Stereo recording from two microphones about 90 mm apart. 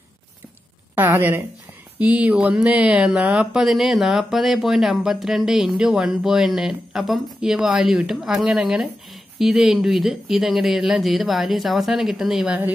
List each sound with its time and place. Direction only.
0.9 s a woman's voice: 25° right (ahead or behind); by 12.5 s 5° right (ahead or behind)